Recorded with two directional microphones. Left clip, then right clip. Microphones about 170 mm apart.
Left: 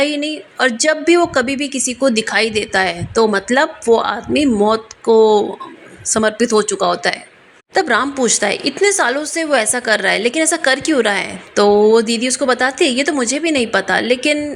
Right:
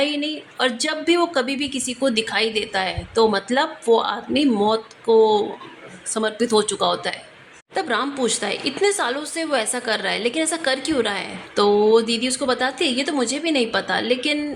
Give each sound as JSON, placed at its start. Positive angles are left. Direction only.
{"t": 0.0, "sound": "a woman's voice", "side_deg": 30}
{"t": 6.4, "sound": "a woman's voice", "side_deg": 20}